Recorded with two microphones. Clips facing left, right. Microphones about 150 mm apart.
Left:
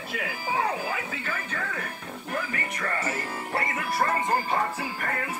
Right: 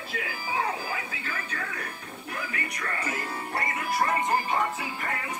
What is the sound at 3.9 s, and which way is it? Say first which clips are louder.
Music: even; 20° right (ahead or behind).